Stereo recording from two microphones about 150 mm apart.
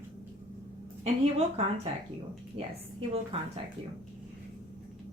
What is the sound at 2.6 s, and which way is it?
Speech, 40° right (ahead or behind).